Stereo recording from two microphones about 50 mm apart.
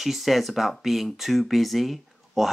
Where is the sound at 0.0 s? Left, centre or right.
Centre.